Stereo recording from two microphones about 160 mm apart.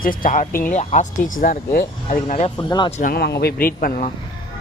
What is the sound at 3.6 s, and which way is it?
Speech, 65° left (ahead or behind).